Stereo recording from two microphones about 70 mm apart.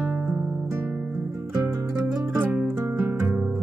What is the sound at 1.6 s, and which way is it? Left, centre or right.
Music, right.